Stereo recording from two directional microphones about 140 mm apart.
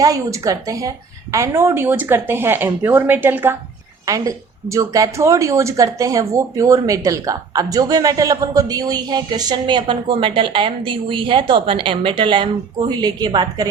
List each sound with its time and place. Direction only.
0.0 s a woman's voice: 25° right (ahead or behind)